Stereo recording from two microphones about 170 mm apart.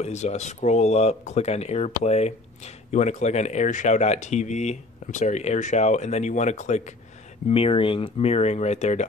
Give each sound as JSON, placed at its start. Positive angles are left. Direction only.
{"t": 0.0, "sound": "speech", "side_deg": 40}
{"t": 7.4, "sound": "speech", "side_deg": 35}